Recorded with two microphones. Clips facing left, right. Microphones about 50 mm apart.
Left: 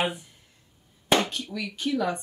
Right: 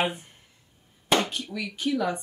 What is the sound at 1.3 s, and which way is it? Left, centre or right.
Speech, centre.